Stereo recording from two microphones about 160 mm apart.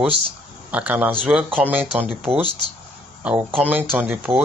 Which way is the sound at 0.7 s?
10° right (ahead or behind).